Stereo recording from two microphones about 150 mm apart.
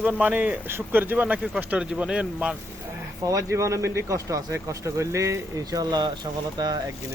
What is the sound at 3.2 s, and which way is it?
Speech, 20° right (ahead or behind).